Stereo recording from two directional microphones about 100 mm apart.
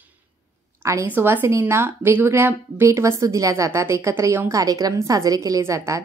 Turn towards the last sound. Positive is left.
turn(degrees=-30)  # may be behind; listen again after turning